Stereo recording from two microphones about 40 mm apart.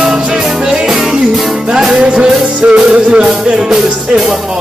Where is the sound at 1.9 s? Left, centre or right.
Right.